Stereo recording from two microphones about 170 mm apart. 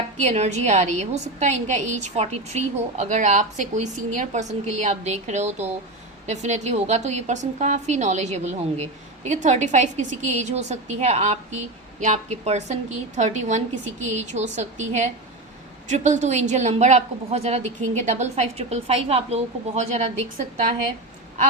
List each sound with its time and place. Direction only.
0.2 s a woman's voice: 40° right (ahead or behind)